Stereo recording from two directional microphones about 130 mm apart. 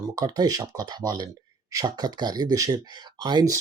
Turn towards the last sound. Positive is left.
turn(degrees=-30)  # may be behind; listen again after turning